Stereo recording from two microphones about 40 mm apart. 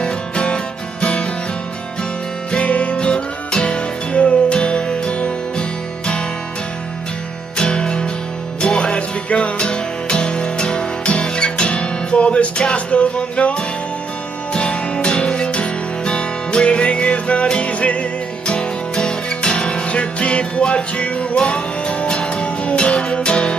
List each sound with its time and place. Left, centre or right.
0.0 s music: left
2.5 s music: left
7.5 s music: left